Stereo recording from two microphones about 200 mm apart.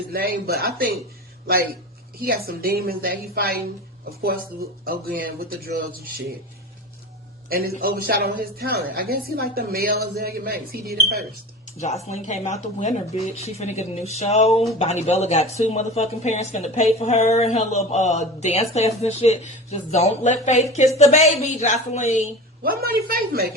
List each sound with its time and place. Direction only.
0.1 s a woman's voice: 50° right (ahead or behind)
2.2 s a woman's voice: 50° right (ahead or behind)
7.5 s a woman's voice: 50° right (ahead or behind)
11.8 s speech: 35° left (ahead or behind)
22.6 s a woman's voice: 45° right (ahead or behind)